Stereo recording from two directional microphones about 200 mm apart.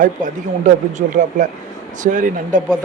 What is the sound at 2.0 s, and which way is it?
Speech, 40° right (ahead or behind).